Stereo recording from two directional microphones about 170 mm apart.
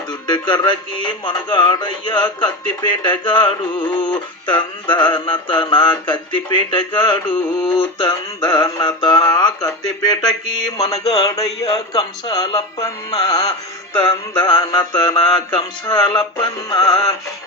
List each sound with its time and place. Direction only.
0.1 s speech: 25° left (ahead or behind)